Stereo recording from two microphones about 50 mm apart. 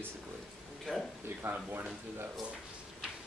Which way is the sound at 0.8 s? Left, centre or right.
Centre.